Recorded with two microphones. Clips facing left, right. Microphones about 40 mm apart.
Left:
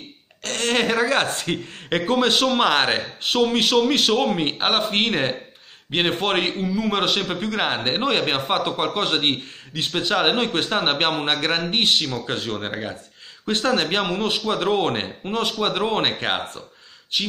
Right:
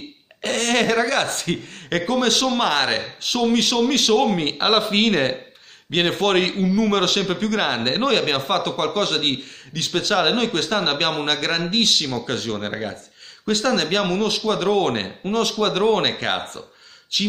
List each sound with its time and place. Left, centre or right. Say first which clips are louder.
0.6 s a sound: right 1 dB; centre
1.0 s a man's voice: left 1 dB; left
4.6 s a man's voice: right 2 dB; centre